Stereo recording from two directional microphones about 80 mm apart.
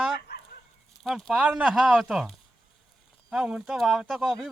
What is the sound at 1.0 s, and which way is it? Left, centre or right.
Speech, centre.